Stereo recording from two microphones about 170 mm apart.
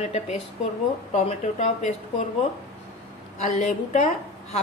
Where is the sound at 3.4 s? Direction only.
40° left (ahead or behind).